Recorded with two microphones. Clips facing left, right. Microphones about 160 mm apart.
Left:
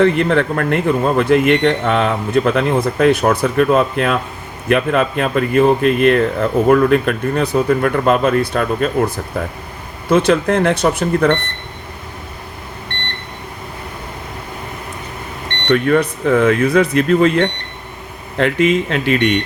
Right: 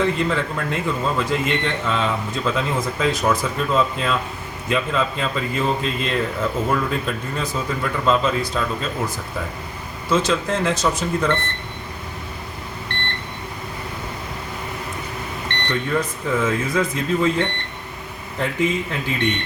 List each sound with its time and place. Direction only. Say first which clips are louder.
0.0 s speech: left 7 dB; 65° left (ahead or behind)
15.6 s speech: left 10 dB; 70° left (ahead or behind)